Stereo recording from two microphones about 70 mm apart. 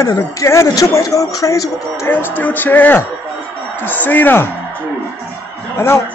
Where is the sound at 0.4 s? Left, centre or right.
Left.